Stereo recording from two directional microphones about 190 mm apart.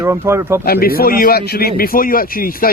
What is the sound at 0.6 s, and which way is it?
A man's voice, 50° left (ahead or behind).